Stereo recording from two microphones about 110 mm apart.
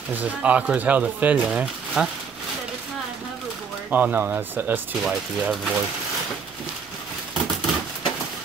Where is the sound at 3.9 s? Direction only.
15° right (ahead or behind).